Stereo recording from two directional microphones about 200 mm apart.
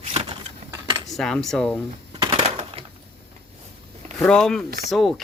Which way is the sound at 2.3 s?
30° right (ahead or behind).